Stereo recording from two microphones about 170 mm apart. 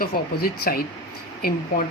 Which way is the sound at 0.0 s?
60° left (ahead or behind).